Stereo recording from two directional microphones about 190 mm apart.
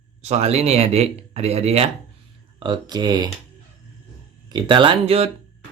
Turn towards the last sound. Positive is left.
turn(degrees=-30)  # may be behind; listen again after turning